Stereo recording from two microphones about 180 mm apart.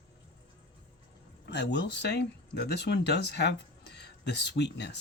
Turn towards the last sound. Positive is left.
turn(degrees=70)  # may be behind; listen again after turning